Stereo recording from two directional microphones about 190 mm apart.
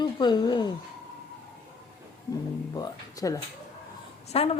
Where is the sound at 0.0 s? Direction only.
25° left (ahead or behind).